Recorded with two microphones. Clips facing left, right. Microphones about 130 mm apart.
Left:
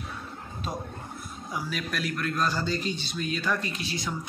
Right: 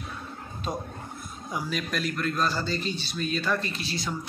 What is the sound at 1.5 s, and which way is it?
Speech, 5° left (ahead or behind).